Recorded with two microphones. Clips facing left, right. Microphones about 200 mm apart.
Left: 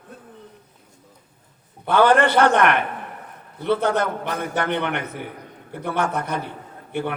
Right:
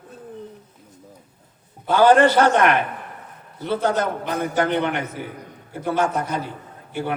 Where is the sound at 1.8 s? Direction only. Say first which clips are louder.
Right 2 dB; 60° left (ahead or behind).